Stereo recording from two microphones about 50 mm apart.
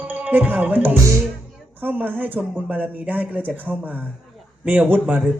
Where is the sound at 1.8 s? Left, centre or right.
Right.